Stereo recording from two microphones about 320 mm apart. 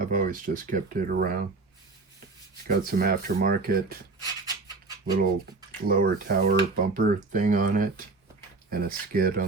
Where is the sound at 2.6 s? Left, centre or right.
Right.